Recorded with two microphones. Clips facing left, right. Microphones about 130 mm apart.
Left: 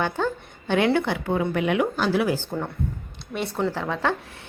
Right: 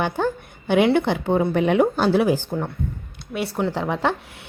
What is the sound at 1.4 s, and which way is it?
Speech, 35° right (ahead or behind).